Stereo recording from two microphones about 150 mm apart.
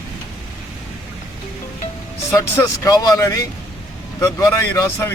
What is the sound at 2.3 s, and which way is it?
Speech, 25° left (ahead or behind).